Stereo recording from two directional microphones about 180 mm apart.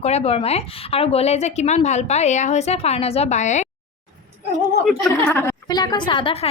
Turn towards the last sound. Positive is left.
turn(degrees=30)  # may be behind; listen again after turning